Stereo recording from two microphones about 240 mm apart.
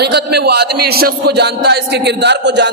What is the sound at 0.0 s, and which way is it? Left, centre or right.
A man's voice, right.